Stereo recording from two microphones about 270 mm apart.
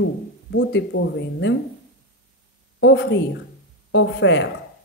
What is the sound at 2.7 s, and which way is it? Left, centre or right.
Speech, left.